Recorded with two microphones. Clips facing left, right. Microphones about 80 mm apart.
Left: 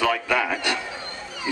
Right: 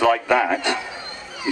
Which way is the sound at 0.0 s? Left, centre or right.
Right.